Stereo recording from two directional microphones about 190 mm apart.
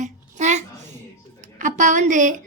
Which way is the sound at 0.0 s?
40° right (ahead or behind).